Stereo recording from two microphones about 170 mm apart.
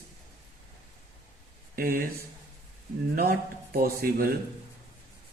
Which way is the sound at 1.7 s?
60° right (ahead or behind).